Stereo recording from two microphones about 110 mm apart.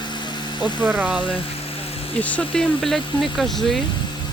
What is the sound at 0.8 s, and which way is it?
Speech, 10° right (ahead or behind).